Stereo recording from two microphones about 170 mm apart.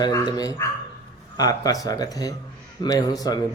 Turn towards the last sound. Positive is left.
turn(degrees=20)  # may be behind; listen again after turning